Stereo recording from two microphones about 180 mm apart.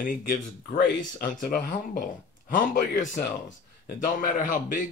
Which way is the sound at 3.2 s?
75° left (ahead or behind).